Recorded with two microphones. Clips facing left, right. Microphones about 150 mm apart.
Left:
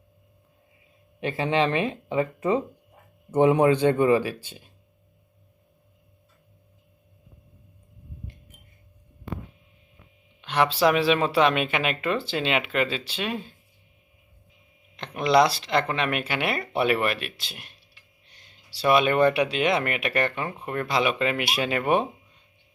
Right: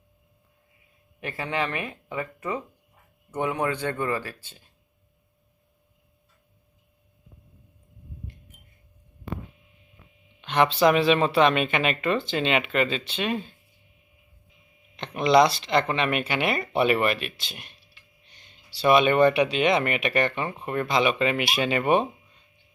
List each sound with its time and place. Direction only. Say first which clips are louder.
1.2 s speech: left 6 dB; 25° left (ahead or behind)
10.4 s speech: right 1 dB; 5° left (ahead or behind)
14.9 s speech: right 1 dB; 5° left (ahead or behind)